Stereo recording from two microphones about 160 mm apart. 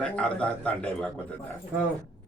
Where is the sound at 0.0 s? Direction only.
5° left (ahead or behind).